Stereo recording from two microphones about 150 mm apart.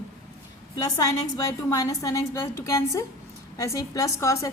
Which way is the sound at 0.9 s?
20° left (ahead or behind).